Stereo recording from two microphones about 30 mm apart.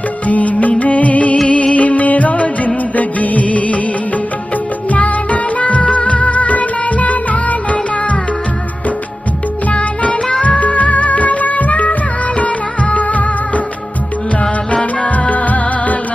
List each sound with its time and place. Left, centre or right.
0.3 s music: left
4.9 s music: left
9.7 s music: left
15.2 s music: left